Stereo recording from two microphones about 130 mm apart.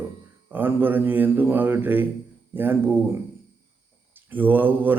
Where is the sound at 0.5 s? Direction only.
15° right (ahead or behind).